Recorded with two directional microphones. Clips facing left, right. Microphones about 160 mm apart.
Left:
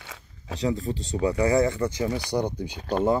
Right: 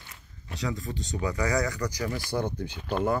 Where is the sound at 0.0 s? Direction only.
90° left.